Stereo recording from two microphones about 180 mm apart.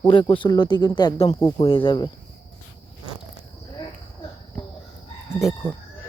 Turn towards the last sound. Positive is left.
turn(degrees=5)  # may be behind; listen again after turning